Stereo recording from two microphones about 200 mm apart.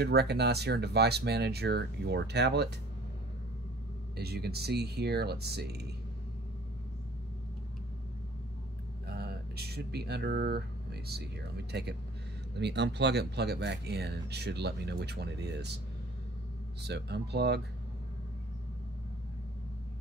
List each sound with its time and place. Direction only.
0.0 s speech: 55° right (ahead or behind)
4.2 s speech: 50° right (ahead or behind)
9.0 s speech: 55° right (ahead or behind)
16.8 s speech: 55° right (ahead or behind)